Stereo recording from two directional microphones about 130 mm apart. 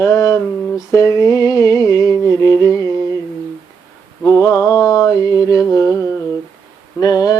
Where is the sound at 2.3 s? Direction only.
30° right (ahead or behind).